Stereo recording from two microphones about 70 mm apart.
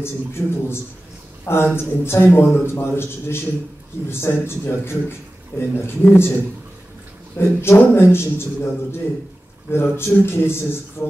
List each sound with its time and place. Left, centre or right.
0.0 s a man's voice: left
7.3 s a man's voice: left
9.7 s a man's voice: left